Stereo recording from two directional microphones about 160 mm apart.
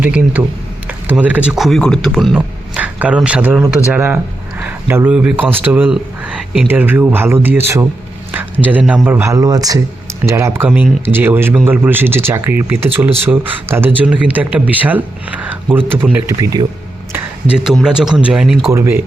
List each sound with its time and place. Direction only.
0.0 s a man's voice: 10° right (ahead or behind)
17.6 s a man's voice: 5° right (ahead or behind)
18.7 s speech: 15° right (ahead or behind)